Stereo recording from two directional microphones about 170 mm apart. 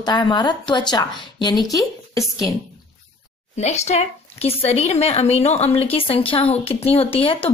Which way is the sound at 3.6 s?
40° left (ahead or behind).